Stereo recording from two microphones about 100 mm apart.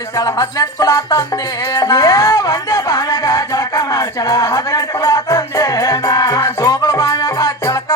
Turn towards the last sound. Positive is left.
turn(degrees=35)  # may be behind; listen again after turning